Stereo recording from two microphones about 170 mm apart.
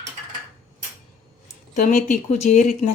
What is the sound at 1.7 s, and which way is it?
A woman's voice, 50° left (ahead or behind).